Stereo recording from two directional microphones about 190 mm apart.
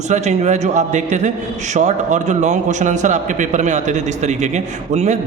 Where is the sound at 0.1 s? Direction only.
40° right (ahead or behind).